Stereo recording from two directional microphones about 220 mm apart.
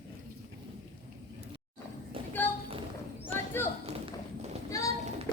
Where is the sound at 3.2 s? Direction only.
10° left (ahead or behind).